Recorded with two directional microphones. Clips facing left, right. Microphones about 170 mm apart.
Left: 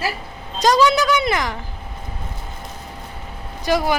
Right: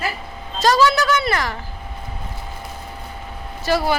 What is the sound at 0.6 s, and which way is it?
A woman's voice, 20° left (ahead or behind).